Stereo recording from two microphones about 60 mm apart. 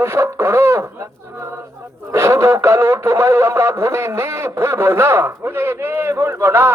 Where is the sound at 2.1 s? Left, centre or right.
Right.